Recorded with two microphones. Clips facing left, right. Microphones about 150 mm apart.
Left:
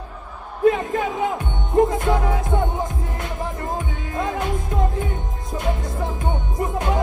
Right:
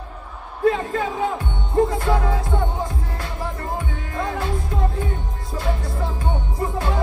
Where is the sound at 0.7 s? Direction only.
20° left (ahead or behind).